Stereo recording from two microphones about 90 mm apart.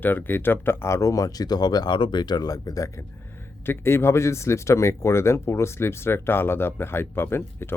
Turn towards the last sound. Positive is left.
turn(degrees=25)  # may be behind; listen again after turning